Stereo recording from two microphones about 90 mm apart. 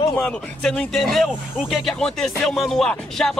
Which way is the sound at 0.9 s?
Centre (ahead or behind).